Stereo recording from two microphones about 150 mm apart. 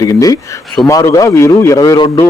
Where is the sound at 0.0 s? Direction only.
25° left (ahead or behind).